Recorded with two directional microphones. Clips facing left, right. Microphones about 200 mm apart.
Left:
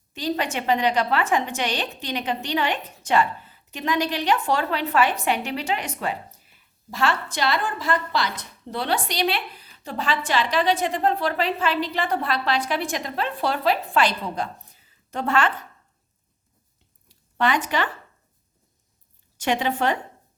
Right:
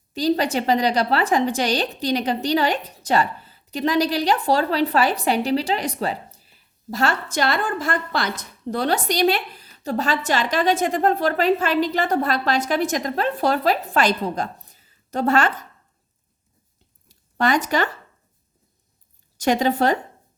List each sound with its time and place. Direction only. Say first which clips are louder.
0.1 s a woman's voice: right 6 dB; 35° right (ahead or behind)
17.1 s a sound: right 2 dB; 40° right (ahead or behind)
19.4 s a woman's voice: right 4 dB; 40° right (ahead or behind)